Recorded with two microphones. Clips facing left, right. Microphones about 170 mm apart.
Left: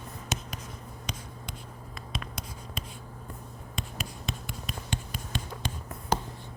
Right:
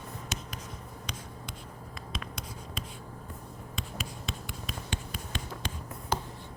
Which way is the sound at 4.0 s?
50° left (ahead or behind).